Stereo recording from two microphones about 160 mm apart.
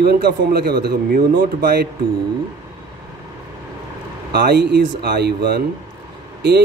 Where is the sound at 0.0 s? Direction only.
75° right (ahead or behind).